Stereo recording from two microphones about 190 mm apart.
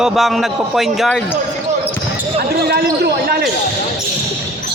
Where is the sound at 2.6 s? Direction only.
55° right (ahead or behind).